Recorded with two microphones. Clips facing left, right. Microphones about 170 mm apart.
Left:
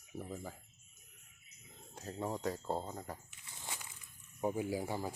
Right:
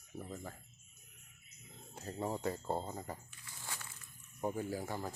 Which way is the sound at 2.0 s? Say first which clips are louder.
Right 1 dB; 5° right (ahead or behind).